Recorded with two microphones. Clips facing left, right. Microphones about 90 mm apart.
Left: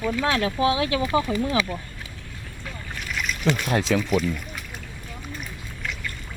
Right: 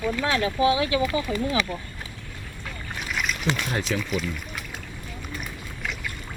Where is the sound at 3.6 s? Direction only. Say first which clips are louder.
Left 5 dB; 60° left (ahead or behind).